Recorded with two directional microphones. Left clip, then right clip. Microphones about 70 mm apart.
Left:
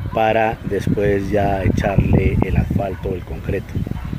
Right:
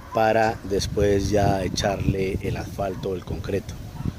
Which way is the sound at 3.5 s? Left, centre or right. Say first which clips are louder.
Left 3 dB; right.